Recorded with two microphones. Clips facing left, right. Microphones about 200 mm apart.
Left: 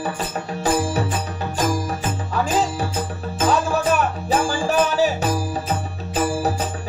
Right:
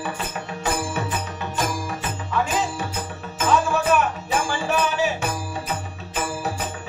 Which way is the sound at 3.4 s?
35° left (ahead or behind).